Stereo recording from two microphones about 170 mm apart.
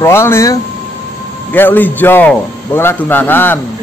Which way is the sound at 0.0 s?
15° left (ahead or behind).